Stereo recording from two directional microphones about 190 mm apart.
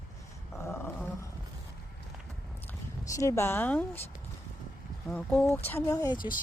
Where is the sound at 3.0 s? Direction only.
15° left (ahead or behind).